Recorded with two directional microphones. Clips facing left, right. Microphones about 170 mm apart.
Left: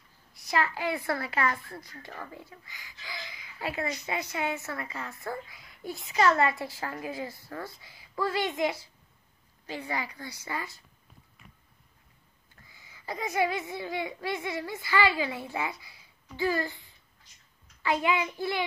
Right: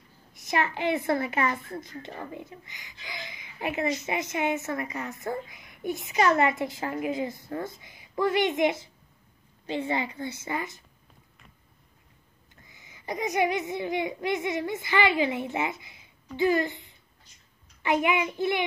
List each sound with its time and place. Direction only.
0.3 s a woman's voice: 20° right (ahead or behind)
12.6 s a woman's voice: 20° right (ahead or behind)